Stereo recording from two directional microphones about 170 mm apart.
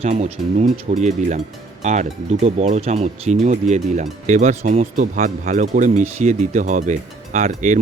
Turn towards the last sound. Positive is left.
turn(degrees=-45)  # may be behind; listen again after turning